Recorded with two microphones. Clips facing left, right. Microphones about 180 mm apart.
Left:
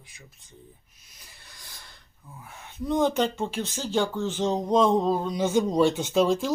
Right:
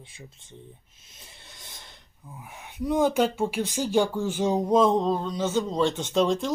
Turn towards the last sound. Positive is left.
turn(degrees=5)  # may be behind; listen again after turning